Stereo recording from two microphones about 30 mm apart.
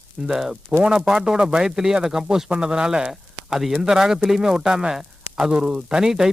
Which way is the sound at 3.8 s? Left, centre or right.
Centre.